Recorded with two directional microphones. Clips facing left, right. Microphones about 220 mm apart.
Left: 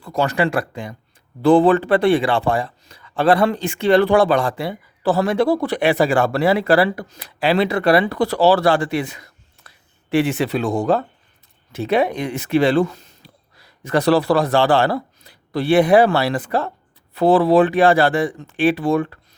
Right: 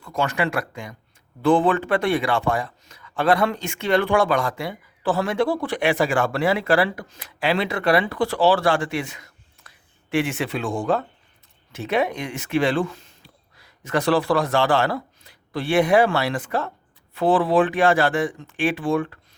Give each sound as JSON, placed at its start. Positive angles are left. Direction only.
{"t": 0.0, "sound": "a man's voice", "side_deg": 35}